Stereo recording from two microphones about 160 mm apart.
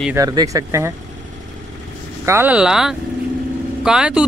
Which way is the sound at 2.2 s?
15° right (ahead or behind).